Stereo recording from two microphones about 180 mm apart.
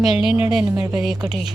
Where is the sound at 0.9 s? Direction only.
Centre (ahead or behind).